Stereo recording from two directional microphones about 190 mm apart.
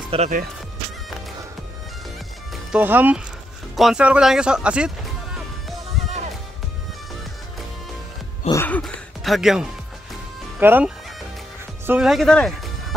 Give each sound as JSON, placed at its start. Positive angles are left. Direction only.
{"t": 0.1, "sound": "speech", "side_deg": -30}
{"t": 2.7, "sound": "speech", "side_deg": -10}
{"t": 8.5, "sound": "speech", "side_deg": 10}